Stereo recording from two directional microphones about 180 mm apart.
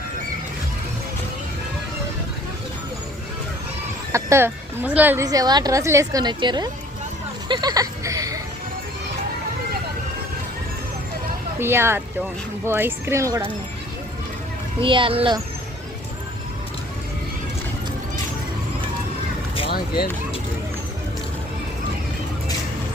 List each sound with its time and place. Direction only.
4.1 s a woman's voice: 15° right (ahead or behind)
11.6 s a woman's voice: 15° right (ahead or behind)
14.8 s a child's voice: 30° right (ahead or behind)